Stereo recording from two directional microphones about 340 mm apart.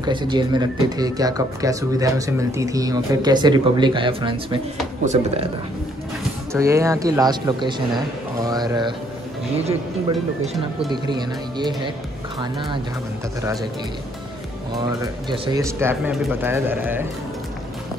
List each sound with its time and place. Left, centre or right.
0.0 s speech: centre
6.5 s speech: centre
13.4 s speech: centre
14.8 s speech: centre